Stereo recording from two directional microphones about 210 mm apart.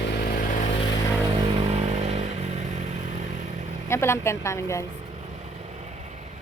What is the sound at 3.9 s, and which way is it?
Speech, 10° left (ahead or behind).